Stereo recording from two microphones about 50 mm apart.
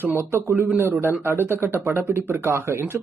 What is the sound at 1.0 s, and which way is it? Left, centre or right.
Speech, right.